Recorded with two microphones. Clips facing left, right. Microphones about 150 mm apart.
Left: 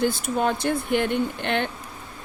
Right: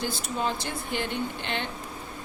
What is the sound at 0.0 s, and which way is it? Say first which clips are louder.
A woman's voice: left 7 dB; 55° left (ahead or behind).